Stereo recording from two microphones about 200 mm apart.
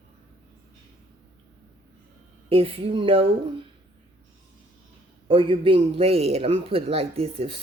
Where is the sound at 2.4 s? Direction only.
30° right (ahead or behind).